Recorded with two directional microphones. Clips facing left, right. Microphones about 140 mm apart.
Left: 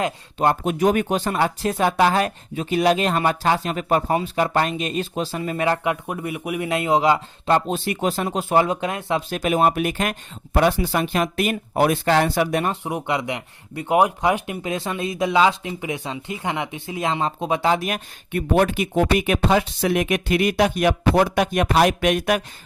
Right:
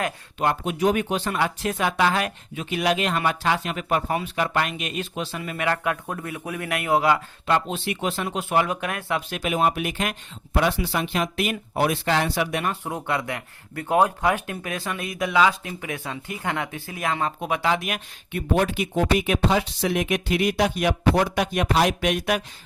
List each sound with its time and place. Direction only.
0.3 s speech: 40° left (ahead or behind); by 7.5 s 20° left (ahead or behind)
7.5 s speech: 40° left (ahead or behind)
9.4 s speech: 40° left (ahead or behind)
12.7 s speech: 15° left (ahead or behind); by 18.0 s 35° left (ahead or behind)
18.3 s speech: 55° left (ahead or behind)